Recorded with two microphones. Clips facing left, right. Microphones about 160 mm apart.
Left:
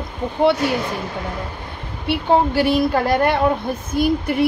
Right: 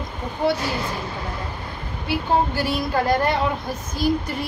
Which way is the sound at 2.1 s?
65° left (ahead or behind).